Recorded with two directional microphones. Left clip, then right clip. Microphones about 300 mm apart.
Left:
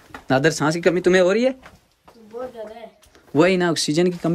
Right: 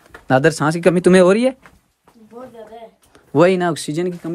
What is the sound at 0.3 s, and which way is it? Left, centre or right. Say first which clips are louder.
Speech: right 4 dB; centre.